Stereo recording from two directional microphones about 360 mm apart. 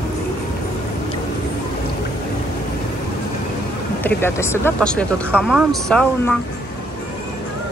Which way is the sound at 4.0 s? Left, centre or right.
Centre.